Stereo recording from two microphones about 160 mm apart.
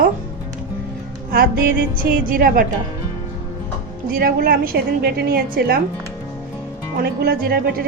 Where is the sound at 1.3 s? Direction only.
65° right (ahead or behind).